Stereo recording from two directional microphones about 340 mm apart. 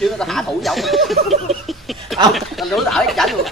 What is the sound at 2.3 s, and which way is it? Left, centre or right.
Speech, centre.